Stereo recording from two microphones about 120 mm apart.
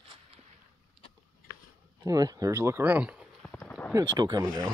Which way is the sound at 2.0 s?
30° right (ahead or behind).